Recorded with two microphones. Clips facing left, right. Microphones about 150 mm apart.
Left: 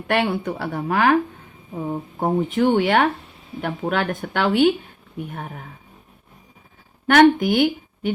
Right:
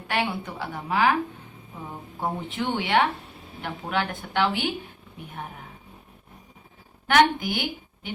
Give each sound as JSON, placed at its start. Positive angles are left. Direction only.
{"t": 0.1, "sound": "a woman's voice", "side_deg": 55}
{"t": 7.1, "sound": "a woman's voice", "side_deg": 55}